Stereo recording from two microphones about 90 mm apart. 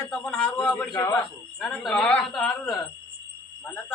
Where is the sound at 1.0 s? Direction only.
30° left (ahead or behind).